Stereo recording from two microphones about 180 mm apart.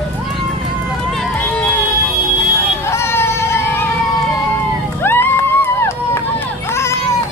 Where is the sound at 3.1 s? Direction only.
15° left (ahead or behind).